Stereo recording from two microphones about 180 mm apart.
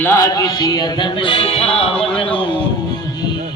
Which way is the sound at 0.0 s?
15° left (ahead or behind).